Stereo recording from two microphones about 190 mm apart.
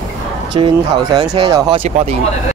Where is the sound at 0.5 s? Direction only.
20° right (ahead or behind).